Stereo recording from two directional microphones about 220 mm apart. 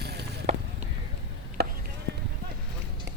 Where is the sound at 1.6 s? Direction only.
45° right (ahead or behind).